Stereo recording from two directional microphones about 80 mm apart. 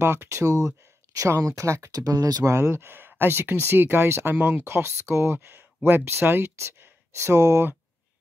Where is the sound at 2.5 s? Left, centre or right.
Right.